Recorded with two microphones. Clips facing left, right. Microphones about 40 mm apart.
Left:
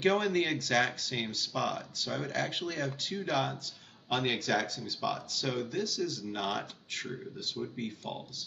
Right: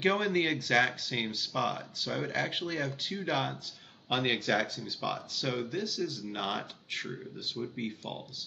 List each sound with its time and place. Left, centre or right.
0.0 s speech: centre